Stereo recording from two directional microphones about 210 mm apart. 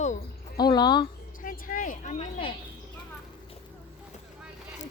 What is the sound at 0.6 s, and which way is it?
Speech, 20° left (ahead or behind).